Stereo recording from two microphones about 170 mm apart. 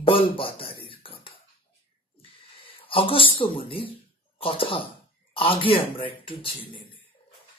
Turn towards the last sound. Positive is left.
turn(degrees=30)  # may be behind; listen again after turning